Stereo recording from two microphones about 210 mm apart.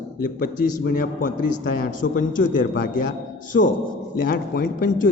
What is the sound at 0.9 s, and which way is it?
A man's voice, 40° left (ahead or behind).